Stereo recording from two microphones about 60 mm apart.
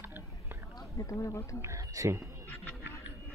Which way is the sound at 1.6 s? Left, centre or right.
Right.